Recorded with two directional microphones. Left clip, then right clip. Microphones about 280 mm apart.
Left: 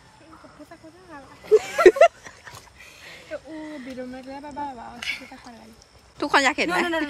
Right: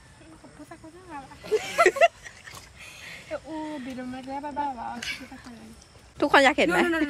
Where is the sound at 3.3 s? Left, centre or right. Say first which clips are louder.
Right 1 dB; centre.